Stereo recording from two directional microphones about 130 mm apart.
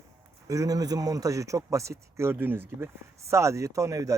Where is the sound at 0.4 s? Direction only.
25° right (ahead or behind).